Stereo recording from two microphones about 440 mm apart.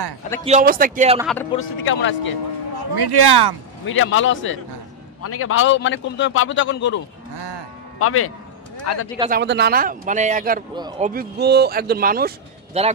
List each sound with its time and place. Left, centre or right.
0.5 s a man's voice: centre
1.2 s speech: centre
1.9 s a man's voice: left
2.9 s speech: right
3.8 s a man's voice: left
7.3 s music: right
8.0 s a man's voice: left
9.2 s a man's voice: right
11.1 s speech: right